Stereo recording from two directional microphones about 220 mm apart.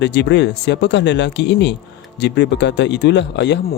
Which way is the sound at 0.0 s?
50° left (ahead or behind).